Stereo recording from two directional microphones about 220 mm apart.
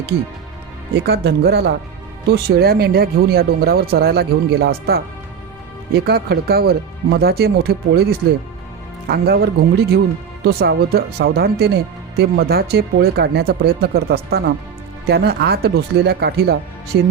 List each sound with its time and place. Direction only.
1.0 s speech: 50° right (ahead or behind)